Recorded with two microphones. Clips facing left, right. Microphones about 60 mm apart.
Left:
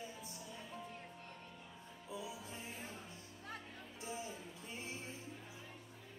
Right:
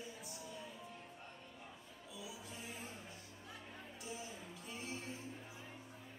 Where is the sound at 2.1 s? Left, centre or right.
Left.